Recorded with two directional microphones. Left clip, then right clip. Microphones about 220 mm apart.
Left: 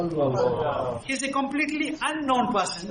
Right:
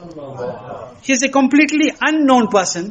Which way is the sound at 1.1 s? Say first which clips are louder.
Right 17 dB; 40° right (ahead or behind).